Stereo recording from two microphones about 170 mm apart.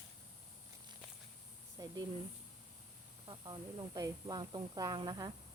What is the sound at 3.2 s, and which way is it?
Speech, 25° right (ahead or behind).